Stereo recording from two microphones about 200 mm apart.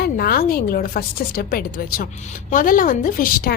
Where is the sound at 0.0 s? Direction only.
50° left (ahead or behind).